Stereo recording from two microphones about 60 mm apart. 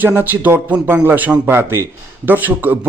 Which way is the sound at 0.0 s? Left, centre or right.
Right.